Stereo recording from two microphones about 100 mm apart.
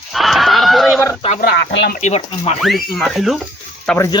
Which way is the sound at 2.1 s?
90° left.